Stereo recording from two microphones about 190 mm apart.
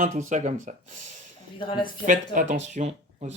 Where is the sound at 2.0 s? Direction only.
40° right (ahead or behind).